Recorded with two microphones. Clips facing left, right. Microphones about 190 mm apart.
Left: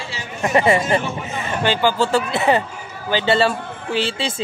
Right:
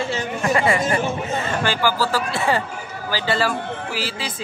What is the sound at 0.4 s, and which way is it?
A man's voice, 25° left (ahead or behind).